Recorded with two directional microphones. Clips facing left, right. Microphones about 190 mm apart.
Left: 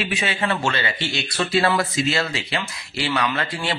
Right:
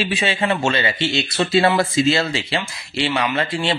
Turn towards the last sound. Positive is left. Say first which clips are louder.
# right 4 dB
turn(degrees=-25)  # may be behind; listen again after turning